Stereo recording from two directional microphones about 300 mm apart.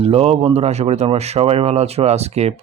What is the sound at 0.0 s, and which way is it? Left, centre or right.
Speech, centre.